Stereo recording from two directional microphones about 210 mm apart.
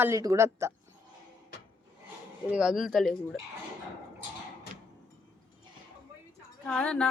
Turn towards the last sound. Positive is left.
turn(degrees=5)  # may be behind; listen again after turning